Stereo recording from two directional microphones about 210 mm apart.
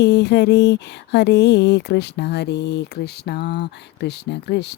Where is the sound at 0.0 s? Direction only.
55° left (ahead or behind).